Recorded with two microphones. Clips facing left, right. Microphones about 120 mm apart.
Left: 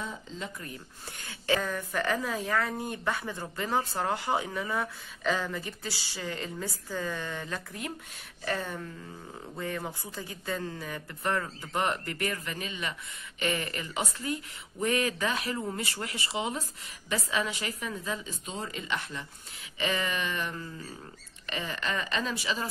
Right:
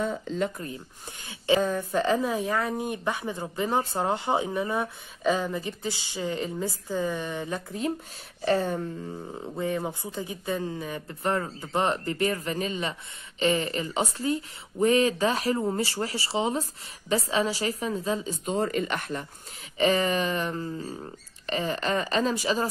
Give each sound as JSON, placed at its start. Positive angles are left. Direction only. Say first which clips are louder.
{"t": 0.0, "sound": "speech", "louder": "right 10 dB", "side_deg": -60}
{"t": 1.2, "sound": "a woman's voice", "louder": "right 6 dB", "side_deg": -20}
{"t": 18.5, "sound": "speech", "louder": "right 9 dB", "side_deg": -50}
{"t": 19.8, "sound": "a woman's voice", "louder": "right 8 dB", "side_deg": -35}